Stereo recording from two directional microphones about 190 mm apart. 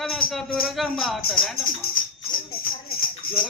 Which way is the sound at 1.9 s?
50° left (ahead or behind).